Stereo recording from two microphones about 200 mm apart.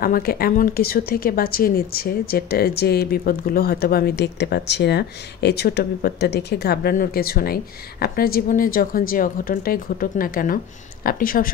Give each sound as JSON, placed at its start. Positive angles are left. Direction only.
{"t": 0.0, "sound": "a woman's voice", "side_deg": 50}